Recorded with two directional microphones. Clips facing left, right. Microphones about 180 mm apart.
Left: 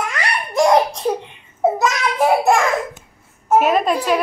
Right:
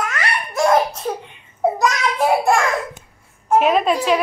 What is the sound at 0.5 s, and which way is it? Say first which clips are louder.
Belly laugh: left 2 dB; 20° left (ahead or behind).